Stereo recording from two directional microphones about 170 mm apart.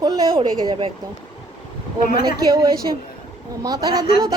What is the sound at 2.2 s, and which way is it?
A woman's voice, 25° right (ahead or behind).